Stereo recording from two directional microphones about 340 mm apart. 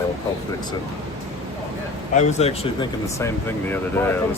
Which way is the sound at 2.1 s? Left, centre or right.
Centre.